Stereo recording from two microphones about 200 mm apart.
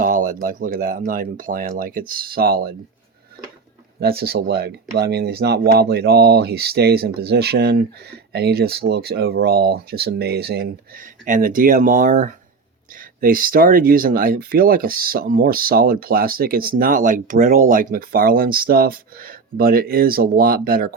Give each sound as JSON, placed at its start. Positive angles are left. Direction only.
{"t": 0.0, "sound": "speech", "side_deg": -40}
{"t": 4.0, "sound": "speech", "side_deg": -50}